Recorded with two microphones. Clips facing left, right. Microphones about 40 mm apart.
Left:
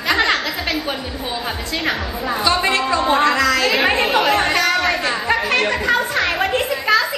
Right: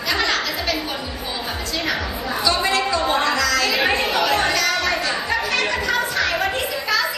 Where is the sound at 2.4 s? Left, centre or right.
Left.